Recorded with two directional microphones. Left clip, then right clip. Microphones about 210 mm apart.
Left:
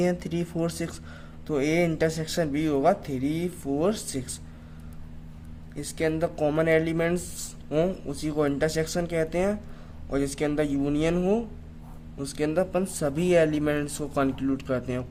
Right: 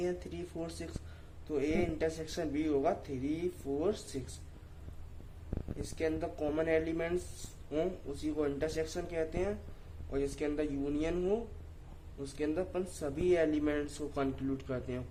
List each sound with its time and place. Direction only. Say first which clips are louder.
0.0 s speech: left 10 dB; 40° left (ahead or behind)
6.0 s speech: left 10 dB; 40° left (ahead or behind)